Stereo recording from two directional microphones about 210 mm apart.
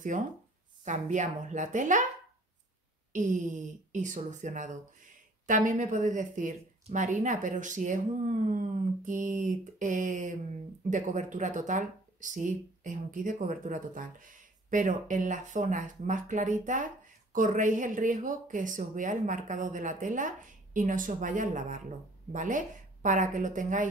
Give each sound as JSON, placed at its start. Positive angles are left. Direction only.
{"t": 0.8, "sound": "speech", "side_deg": -35}
{"t": 3.1, "sound": "speech", "side_deg": -35}